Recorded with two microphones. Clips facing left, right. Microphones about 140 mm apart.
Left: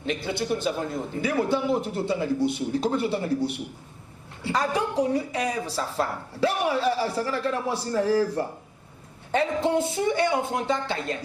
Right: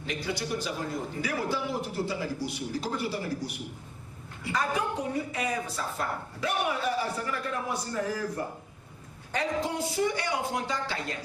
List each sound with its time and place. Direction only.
0.0 s a man's voice: 25° left (ahead or behind)